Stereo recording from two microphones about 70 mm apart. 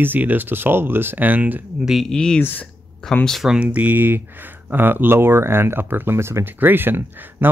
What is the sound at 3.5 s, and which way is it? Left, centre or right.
Speech, centre.